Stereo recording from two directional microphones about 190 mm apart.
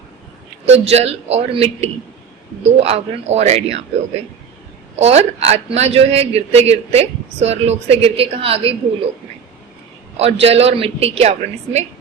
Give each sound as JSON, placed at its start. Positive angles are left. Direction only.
{"t": 0.6, "sound": "a man's voice", "side_deg": -35}
{"t": 4.9, "sound": "a man's voice", "side_deg": -35}
{"t": 10.2, "sound": "a man's voice", "side_deg": -30}